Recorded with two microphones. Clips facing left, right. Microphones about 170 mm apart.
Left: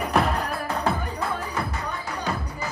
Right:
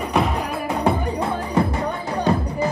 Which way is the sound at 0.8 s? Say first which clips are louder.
Right 7 dB; 25° right (ahead or behind).